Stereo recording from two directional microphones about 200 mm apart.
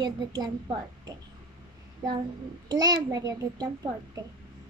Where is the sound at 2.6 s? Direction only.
20° right (ahead or behind).